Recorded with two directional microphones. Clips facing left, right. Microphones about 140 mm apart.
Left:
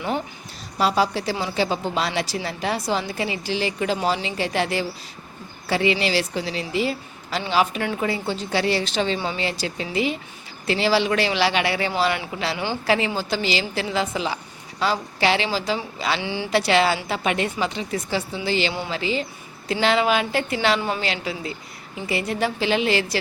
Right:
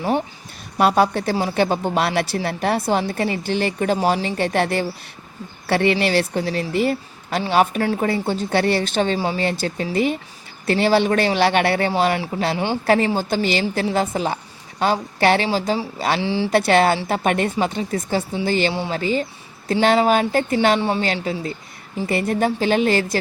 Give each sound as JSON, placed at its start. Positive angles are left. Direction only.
{"t": 0.8, "sound": "speech", "side_deg": -55}
{"t": 9.1, "sound": "speech", "side_deg": -35}
{"t": 9.4, "sound": "speech", "side_deg": -50}
{"t": 11.9, "sound": "speech", "side_deg": -40}
{"t": 16.2, "sound": "speech", "side_deg": -30}
{"t": 16.5, "sound": "speech", "side_deg": -50}
{"t": 20.7, "sound": "a woman's voice", "side_deg": -30}
{"t": 21.0, "sound": "speech", "side_deg": -45}